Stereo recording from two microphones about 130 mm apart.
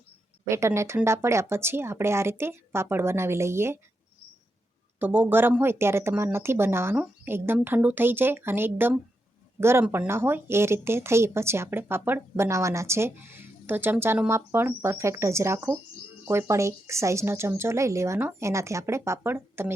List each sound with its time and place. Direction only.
0.4 s speech: 20° right (ahead or behind)
4.9 s speech: 15° right (ahead or behind)
9.8 s speech: 10° right (ahead or behind)